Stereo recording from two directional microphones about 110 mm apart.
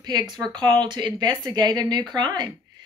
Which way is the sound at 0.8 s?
45° right (ahead or behind).